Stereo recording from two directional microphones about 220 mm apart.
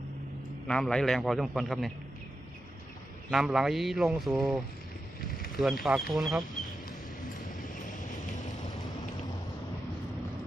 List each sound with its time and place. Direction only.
0.7 s speech: 5° left (ahead or behind)
3.2 s speech: 5° right (ahead or behind)
7.3 s vehicle: 35° left (ahead or behind)